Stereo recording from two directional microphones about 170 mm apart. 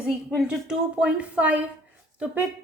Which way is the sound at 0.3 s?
5° right (ahead or behind).